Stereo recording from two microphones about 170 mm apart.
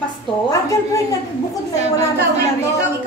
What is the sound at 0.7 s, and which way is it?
Speech, 20° left (ahead or behind).